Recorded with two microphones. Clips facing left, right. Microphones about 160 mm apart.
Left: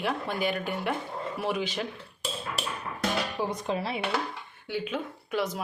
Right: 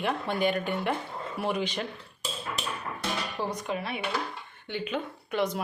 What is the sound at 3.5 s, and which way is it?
Speech, 30° left (ahead or behind).